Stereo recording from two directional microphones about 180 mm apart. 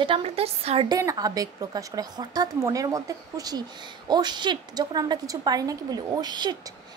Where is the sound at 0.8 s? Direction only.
20° right (ahead or behind).